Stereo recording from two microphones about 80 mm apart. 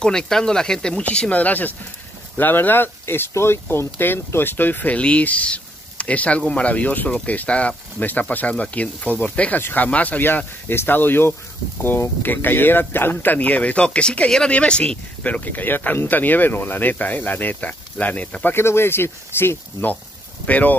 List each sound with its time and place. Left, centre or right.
0.0 s speech: centre